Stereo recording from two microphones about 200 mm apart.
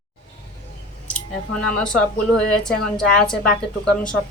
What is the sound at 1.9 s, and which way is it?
A woman's voice, 5° left (ahead or behind).